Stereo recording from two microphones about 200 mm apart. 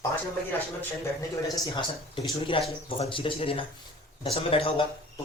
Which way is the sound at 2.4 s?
25° left (ahead or behind).